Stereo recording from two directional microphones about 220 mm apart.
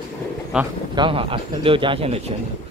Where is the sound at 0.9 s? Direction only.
20° right (ahead or behind).